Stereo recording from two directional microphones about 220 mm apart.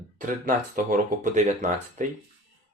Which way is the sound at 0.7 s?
35° right (ahead or behind).